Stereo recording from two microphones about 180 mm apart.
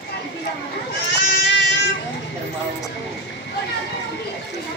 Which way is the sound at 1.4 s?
80° left.